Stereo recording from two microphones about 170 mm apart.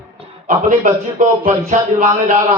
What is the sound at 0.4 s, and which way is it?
Speech, 50° right (ahead or behind).